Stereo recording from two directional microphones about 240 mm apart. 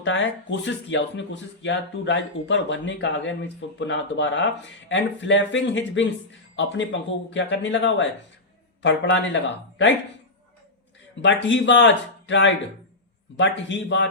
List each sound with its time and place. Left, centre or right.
0.0 s speech: left
11.2 s speech: left